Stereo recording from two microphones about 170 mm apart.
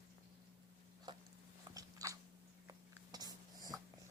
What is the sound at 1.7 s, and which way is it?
Biting, 20° right (ahead or behind).